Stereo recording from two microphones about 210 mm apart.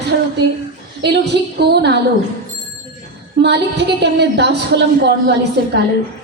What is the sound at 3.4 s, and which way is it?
A woman's voice, 55° right (ahead or behind).